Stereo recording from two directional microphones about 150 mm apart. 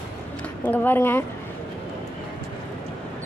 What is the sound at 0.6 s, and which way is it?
Speech, 10° left (ahead or behind).